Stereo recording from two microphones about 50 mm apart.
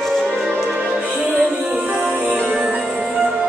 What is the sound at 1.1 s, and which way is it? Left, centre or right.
Music, centre.